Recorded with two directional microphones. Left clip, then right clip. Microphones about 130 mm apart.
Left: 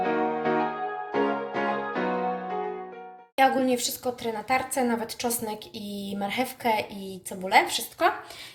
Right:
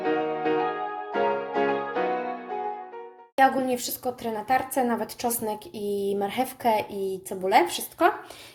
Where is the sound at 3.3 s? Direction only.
40° right (ahead or behind).